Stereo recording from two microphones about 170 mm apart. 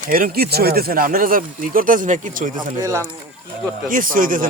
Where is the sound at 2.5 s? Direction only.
20° right (ahead or behind).